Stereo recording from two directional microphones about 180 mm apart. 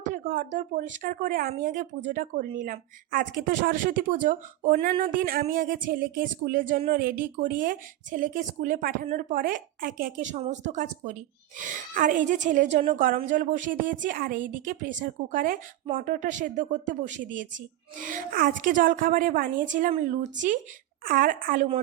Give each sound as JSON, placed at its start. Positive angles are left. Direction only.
{"t": 0.0, "sound": "speech", "side_deg": -50}